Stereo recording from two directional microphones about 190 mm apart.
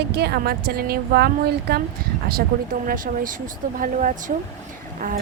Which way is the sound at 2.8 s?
45° right (ahead or behind).